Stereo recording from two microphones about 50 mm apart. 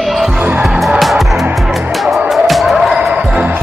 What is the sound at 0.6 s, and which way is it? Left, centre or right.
Music, centre.